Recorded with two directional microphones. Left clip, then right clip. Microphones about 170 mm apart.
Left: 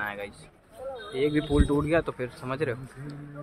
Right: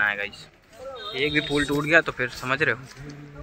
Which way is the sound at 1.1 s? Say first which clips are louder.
Right 2 dB; 20° left (ahead or behind).